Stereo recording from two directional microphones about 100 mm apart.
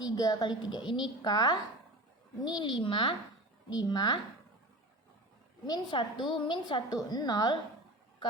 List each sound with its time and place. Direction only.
0.0 s a woman's voice: 40° left (ahead or behind); by 3.2 s 60° left (ahead or behind)
3.7 s a woman's voice: 40° left (ahead or behind)
5.6 s a woman's voice: 45° left (ahead or behind)